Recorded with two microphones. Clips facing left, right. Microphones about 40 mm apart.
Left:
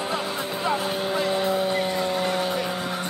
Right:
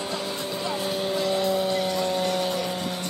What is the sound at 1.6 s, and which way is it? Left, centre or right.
Music, centre.